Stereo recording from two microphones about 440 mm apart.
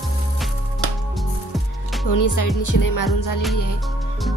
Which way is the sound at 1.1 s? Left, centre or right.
Centre.